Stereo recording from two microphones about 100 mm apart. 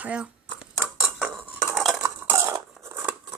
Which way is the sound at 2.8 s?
30° right (ahead or behind).